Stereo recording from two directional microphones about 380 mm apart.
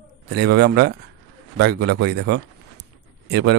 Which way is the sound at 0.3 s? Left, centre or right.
Right.